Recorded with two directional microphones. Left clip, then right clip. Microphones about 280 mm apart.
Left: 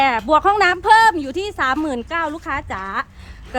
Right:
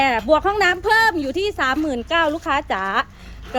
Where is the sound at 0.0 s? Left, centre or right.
Centre.